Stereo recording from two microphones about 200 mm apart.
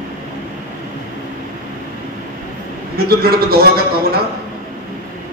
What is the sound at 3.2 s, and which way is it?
Speech, 50° right (ahead or behind).